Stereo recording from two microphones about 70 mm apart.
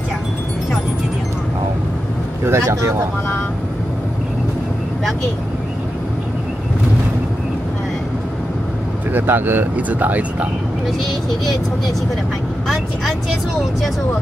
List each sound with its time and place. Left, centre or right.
2.4 s speech: right
9.1 s speech: right